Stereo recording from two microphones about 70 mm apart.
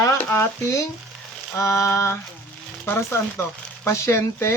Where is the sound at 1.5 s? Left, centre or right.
Left.